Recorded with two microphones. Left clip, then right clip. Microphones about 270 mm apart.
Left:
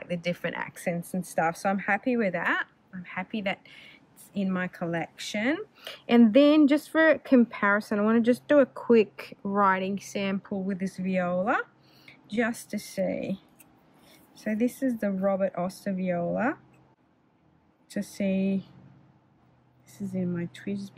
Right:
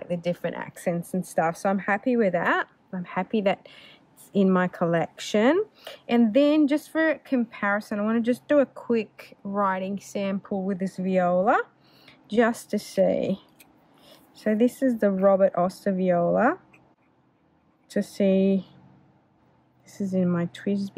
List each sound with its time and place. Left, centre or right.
0.0 s speech: centre
18.1 s speech: centre
20.0 s speech: centre